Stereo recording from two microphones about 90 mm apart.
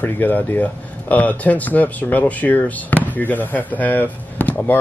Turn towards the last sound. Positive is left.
turn(degrees=20)  # may be behind; listen again after turning